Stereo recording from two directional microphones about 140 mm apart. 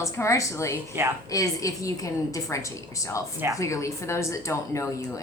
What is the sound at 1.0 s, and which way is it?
Speech, 20° right (ahead or behind).